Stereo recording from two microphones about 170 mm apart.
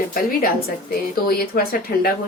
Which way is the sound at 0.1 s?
55° left (ahead or behind).